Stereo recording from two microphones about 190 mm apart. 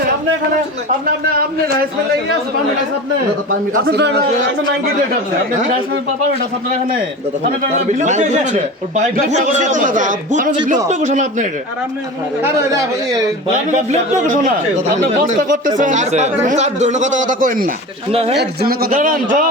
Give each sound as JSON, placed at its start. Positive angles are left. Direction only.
{"t": 3.8, "sound": "speech", "side_deg": -60}
{"t": 7.9, "sound": "a man's voice", "side_deg": -40}
{"t": 13.7, "sound": "a man's voice", "side_deg": -40}
{"t": 18.1, "sound": "speech", "side_deg": -30}
{"t": 18.3, "sound": "a man's voice", "side_deg": -55}